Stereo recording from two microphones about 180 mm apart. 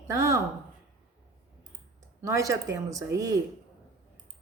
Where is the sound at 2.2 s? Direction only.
15° right (ahead or behind).